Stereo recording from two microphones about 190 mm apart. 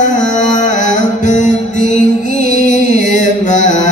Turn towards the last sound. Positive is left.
turn(degrees=40)  # may be behind; listen again after turning